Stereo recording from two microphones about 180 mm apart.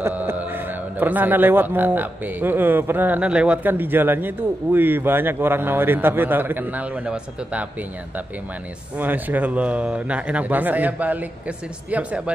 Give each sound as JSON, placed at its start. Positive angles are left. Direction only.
{"t": 0.0, "sound": "a sound", "side_deg": -10}
{"t": 0.9, "sound": "a man's voice", "side_deg": -10}
{"t": 8.9, "sound": "a man's voice", "side_deg": -10}